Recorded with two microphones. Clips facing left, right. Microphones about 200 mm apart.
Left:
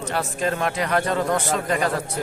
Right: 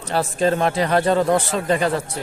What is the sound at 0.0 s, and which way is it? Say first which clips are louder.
A man's voice: right 5 dB; 30° right (ahead or behind).